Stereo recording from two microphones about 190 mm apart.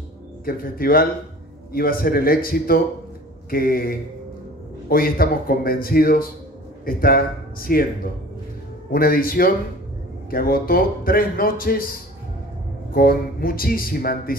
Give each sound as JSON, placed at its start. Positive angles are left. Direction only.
{"t": 0.5, "sound": "a man's voice", "side_deg": 50}
{"t": 12.9, "sound": "a man's voice", "side_deg": 50}